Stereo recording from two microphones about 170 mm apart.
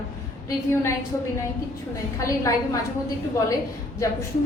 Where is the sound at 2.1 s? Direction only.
15° left (ahead or behind).